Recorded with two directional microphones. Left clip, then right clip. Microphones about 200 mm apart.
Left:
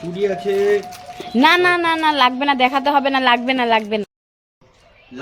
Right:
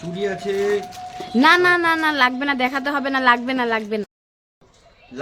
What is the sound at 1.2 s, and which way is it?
A woman's voice, centre (ahead or behind).